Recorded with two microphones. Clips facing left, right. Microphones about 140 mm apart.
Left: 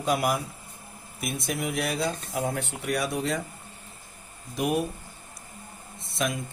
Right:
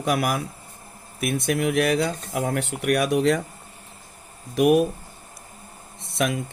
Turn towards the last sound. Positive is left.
turn(degrees=-70)  # may be behind; listen again after turning